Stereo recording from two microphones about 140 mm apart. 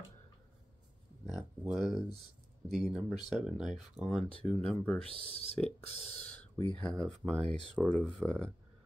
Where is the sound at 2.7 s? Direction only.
Centre (ahead or behind).